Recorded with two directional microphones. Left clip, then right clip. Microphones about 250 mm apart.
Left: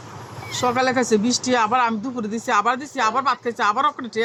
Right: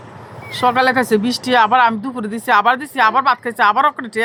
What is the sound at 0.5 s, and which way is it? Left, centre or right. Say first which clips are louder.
Speech: right 6 dB; centre.